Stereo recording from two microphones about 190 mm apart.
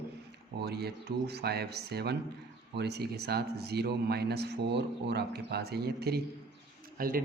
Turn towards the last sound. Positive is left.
turn(degrees=-50)  # may be behind; listen again after turning